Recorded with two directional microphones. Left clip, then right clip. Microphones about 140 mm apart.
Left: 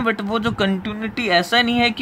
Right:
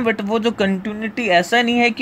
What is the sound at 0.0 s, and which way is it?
Speech, 20° right (ahead or behind).